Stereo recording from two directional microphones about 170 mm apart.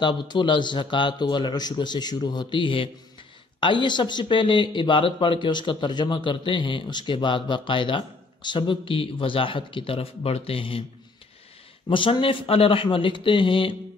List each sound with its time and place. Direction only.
0.0 s speech: 25° left (ahead or behind)
11.9 s speech: 30° left (ahead or behind)